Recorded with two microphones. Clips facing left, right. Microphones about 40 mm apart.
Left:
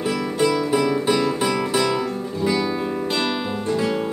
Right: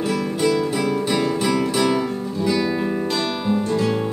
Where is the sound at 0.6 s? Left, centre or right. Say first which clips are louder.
Left 1 dB; left.